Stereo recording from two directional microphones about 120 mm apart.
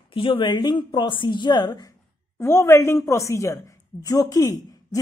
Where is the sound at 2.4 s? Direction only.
20° left (ahead or behind).